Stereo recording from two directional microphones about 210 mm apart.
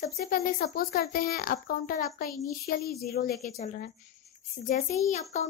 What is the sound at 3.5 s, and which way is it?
Speech, 35° left (ahead or behind).